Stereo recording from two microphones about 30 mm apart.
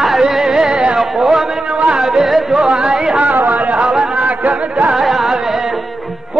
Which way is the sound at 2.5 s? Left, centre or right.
Right.